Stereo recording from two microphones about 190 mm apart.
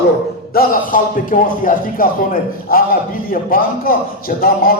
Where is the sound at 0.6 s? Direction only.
45° left (ahead or behind).